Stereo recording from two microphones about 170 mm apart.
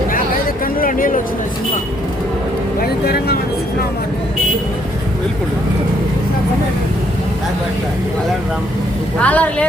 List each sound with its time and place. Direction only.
0.6 s a sound: 55° left (ahead or behind)
2.8 s speech: 70° left (ahead or behind)
9.2 s speech: 10° left (ahead or behind)